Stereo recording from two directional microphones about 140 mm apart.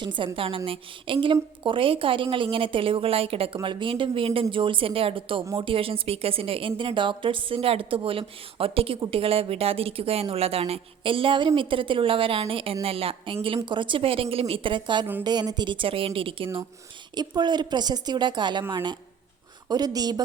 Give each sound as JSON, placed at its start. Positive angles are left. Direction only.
{"t": 0.0, "sound": "a woman's voice", "side_deg": -35}